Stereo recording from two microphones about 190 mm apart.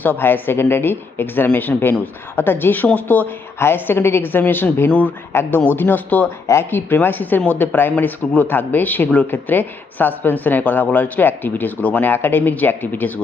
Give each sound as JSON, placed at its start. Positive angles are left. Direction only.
{"t": 0.0, "sound": "speech", "side_deg": 10}